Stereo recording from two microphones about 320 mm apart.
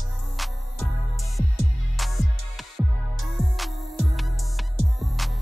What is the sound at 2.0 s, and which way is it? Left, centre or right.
Music, centre.